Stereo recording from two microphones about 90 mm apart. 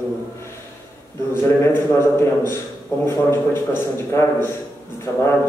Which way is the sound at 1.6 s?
30° left (ahead or behind).